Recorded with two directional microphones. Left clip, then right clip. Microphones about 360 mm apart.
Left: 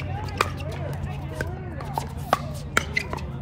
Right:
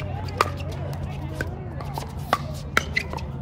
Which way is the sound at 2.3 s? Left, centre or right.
Centre.